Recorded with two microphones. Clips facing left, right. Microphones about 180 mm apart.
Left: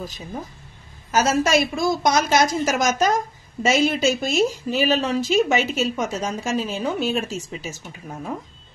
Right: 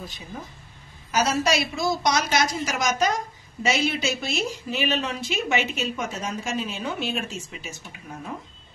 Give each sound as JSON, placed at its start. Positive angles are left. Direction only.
{"t": 1.1, "sound": "a woman's voice", "side_deg": 45}